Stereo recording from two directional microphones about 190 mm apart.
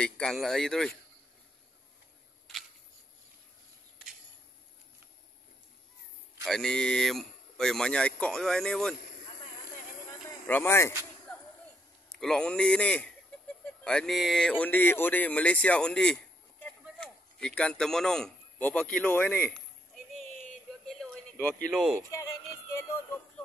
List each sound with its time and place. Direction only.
0.0 s speech: 5° left (ahead or behind)
6.4 s speech: 5° left (ahead or behind)
10.4 s speech: 10° left (ahead or behind)
12.1 s a man's voice: 5° left (ahead or behind)
20.8 s a sound: 5° left (ahead or behind)
22.1 s music: 15° left (ahead or behind)